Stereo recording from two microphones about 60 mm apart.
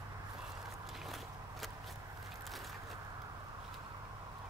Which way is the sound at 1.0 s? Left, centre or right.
Centre.